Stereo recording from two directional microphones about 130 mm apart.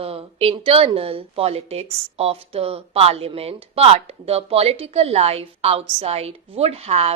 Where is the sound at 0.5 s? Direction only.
45° right (ahead or behind).